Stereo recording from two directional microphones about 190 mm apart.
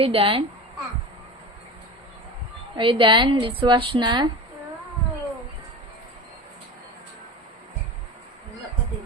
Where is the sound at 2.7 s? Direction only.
25° right (ahead or behind).